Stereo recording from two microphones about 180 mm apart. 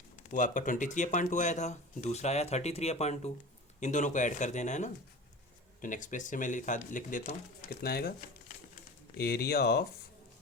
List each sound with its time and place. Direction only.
0.3 s speech: 45° left (ahead or behind)
9.1 s speech: 60° left (ahead or behind)